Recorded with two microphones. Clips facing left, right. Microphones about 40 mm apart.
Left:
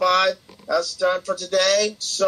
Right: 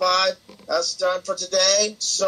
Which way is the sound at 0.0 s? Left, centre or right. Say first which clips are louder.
Left 2 dB; centre.